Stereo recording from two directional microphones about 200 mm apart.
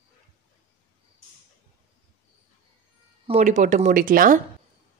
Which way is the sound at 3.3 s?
35° right (ahead or behind).